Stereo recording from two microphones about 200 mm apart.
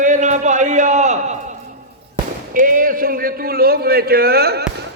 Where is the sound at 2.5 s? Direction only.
45° right (ahead or behind).